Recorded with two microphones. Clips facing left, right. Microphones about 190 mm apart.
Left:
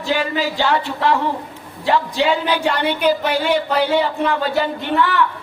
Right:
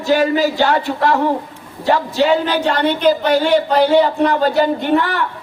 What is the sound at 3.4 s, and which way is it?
A man's voice, 40° right (ahead or behind).